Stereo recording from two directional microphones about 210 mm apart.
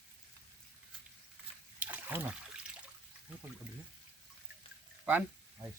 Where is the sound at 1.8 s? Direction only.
10° right (ahead or behind).